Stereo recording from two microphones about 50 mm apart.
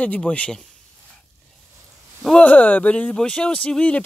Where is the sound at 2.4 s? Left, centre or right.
Left.